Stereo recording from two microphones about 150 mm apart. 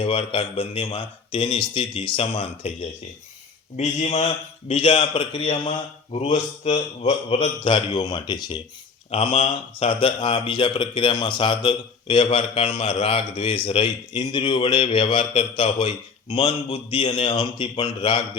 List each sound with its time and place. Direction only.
0.0 s a man's voice: 40° left (ahead or behind)
3.8 s a man's voice: 45° left (ahead or behind)